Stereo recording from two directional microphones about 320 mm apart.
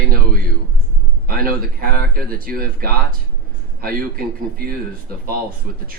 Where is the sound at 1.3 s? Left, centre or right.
Right.